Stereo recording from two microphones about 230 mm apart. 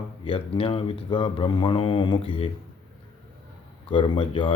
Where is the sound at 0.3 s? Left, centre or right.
Left.